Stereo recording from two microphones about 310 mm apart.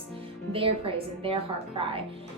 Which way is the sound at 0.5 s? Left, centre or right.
Centre.